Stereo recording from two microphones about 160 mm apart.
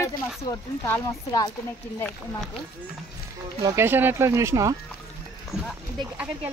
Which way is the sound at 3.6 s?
15° right (ahead or behind).